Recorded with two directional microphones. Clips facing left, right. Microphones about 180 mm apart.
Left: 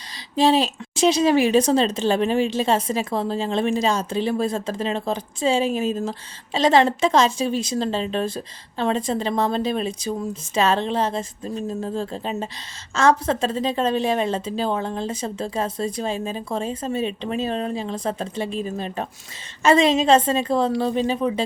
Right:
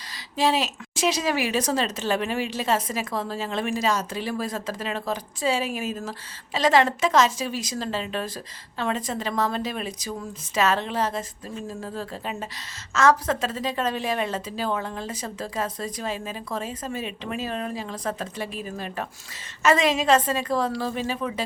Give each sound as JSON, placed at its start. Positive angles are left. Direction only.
{"t": 0.3, "sound": "a woman's voice", "side_deg": 30}
{"t": 21.2, "sound": "speech", "side_deg": 35}